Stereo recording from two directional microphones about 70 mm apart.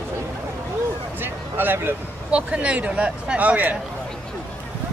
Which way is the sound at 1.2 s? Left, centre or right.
Right.